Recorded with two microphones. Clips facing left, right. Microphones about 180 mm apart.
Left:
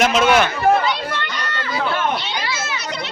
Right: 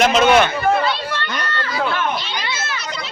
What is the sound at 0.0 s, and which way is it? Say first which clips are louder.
Speech: right 2 dB; 5° left (ahead or behind).